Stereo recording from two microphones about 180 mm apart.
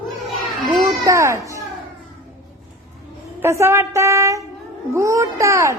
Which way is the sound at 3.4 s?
15° right (ahead or behind).